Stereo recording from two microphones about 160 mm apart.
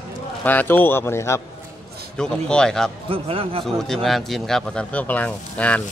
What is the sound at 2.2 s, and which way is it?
Speech, 5° left (ahead or behind).